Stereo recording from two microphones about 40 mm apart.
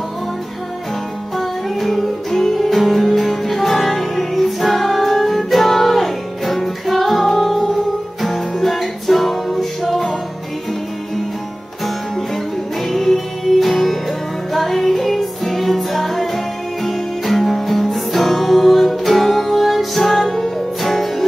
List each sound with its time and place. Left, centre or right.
1.3 s music: centre
12.8 s music: centre